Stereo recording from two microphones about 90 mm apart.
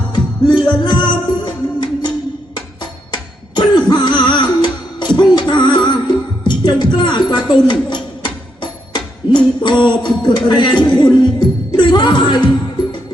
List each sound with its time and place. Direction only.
0.1 s music: 60° left (ahead or behind)